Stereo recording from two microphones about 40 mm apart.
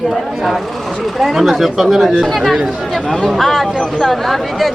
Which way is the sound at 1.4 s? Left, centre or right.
Centre.